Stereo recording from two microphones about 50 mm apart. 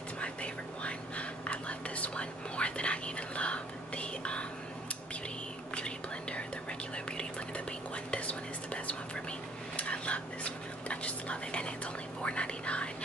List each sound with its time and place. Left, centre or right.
0.2 s whispering: left
5.8 s whispering: left